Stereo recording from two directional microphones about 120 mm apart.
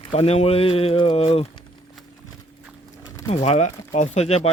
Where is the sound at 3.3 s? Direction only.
70° left (ahead or behind).